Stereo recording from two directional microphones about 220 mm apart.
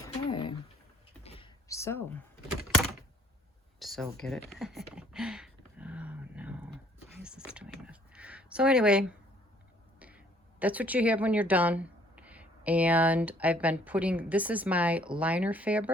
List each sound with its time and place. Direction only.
0.0 s a sound: 20° left (ahead or behind)
1.6 s speech: 15° left (ahead or behind)
3.8 s speech: centre (ahead or behind)
4.4 s a sound: centre (ahead or behind)
7.2 s whispering: 5° right (ahead or behind)
10.0 s speech: 5° right (ahead or behind)